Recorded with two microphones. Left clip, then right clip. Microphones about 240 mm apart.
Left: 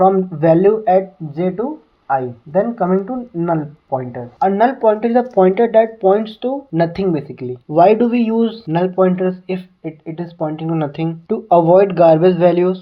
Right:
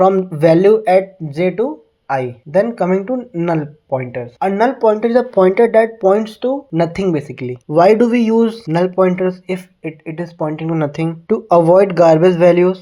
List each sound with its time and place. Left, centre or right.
0.0 s speech: right
4.4 s speech: right